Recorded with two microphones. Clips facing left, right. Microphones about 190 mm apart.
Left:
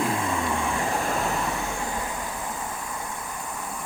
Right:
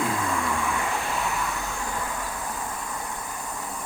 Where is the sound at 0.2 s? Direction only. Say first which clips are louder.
Left 1 dB; 25° left (ahead or behind).